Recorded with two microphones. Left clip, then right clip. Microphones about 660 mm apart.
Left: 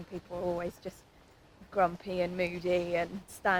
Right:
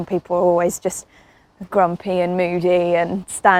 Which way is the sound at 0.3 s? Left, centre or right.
Right.